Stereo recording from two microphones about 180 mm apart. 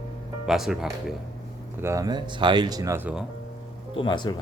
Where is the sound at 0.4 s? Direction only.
Centre (ahead or behind).